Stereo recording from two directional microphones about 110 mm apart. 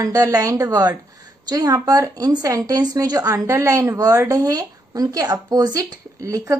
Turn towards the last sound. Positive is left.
turn(degrees=-30)  # may be behind; listen again after turning